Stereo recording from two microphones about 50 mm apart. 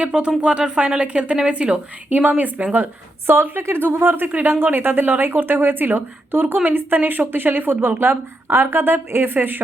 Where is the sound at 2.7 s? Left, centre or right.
Right.